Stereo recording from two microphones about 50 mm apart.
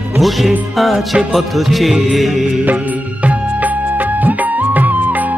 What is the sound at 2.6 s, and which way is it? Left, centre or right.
Music, right.